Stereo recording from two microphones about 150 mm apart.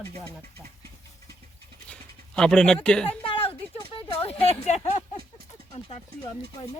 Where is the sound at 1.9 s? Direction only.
5° left (ahead or behind).